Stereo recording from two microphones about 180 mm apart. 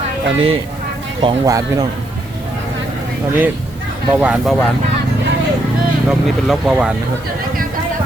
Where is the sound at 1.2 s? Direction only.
25° right (ahead or behind).